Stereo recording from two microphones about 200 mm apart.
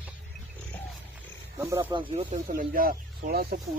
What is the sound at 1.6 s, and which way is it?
Speech, 15° right (ahead or behind).